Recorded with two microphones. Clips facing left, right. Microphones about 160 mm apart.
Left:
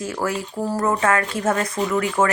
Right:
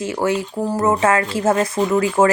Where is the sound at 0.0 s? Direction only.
25° right (ahead or behind).